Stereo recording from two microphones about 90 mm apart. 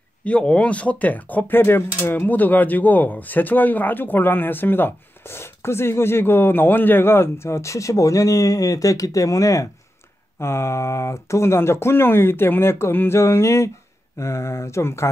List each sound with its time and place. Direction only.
0.2 s speech: 10° left (ahead or behind); by 15.0 s 30° left (ahead or behind)